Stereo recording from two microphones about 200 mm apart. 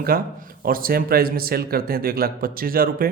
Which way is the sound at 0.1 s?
45° right (ahead or behind).